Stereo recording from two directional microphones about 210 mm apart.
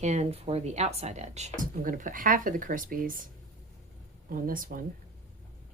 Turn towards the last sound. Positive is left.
turn(degrees=-40)  # may be behind; listen again after turning